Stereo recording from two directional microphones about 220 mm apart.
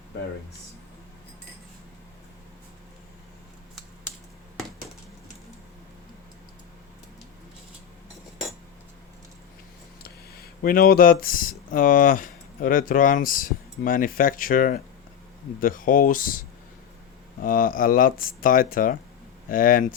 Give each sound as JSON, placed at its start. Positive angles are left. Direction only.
{"t": 10.4, "sound": "speech", "side_deg": 40}
{"t": 17.4, "sound": "speech", "side_deg": 40}